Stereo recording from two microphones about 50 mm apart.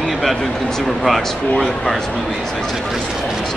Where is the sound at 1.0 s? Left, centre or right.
Centre.